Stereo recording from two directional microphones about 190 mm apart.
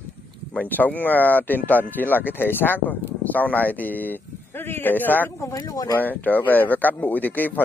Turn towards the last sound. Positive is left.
turn(degrees=10)  # may be behind; listen again after turning